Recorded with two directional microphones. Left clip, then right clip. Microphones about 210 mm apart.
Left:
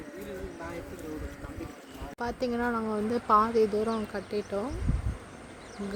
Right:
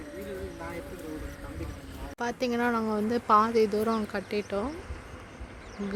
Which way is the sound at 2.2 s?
5° right (ahead or behind).